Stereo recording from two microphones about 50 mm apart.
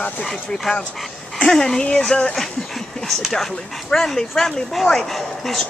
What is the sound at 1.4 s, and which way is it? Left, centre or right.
Speech, centre.